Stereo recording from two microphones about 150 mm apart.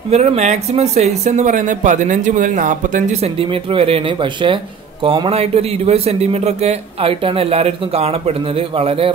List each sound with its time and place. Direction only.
0.1 s speech: 45° right (ahead or behind)